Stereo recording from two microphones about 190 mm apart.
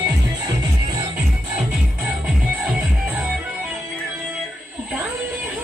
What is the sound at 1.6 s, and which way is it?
Music, 5° right (ahead or behind).